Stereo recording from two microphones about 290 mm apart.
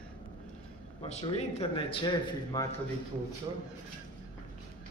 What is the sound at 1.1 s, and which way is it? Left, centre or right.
Speech, centre.